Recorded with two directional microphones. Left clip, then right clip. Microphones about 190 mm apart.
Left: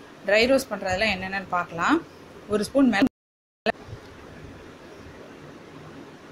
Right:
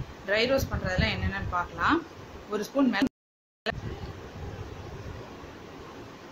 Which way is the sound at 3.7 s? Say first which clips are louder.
Left 7 dB; 25° left (ahead or behind).